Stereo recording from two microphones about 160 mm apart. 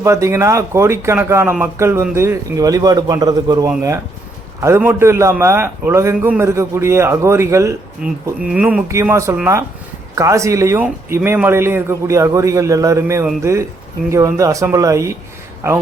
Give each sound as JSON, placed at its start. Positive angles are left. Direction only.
{"t": 0.0, "sound": "a man's voice", "side_deg": -20}
{"t": 8.0, "sound": "a man's voice", "side_deg": -5}